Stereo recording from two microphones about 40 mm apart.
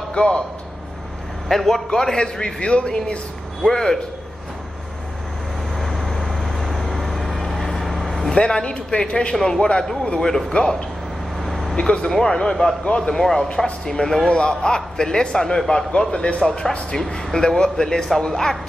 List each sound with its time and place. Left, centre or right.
0.1 s a man's voice: left
1.5 s a man's voice: centre
1.9 s a man's voice: centre
3.6 s a man's voice: centre
5.8 s vehicle: centre
8.4 s a man's voice: left
11.3 s a sound: centre
12.1 s a man's voice: centre
13.2 s a man's voice: centre
16.1 s a man's voice: left